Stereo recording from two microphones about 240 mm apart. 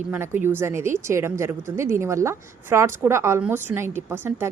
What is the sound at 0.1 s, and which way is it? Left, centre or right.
A woman's voice, centre.